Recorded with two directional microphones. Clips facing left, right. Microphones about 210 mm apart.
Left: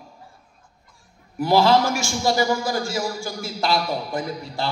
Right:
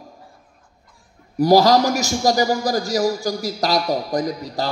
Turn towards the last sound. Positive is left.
turn(degrees=-40)  # may be behind; listen again after turning